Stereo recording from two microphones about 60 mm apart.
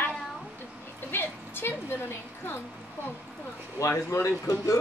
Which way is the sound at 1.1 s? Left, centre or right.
Left.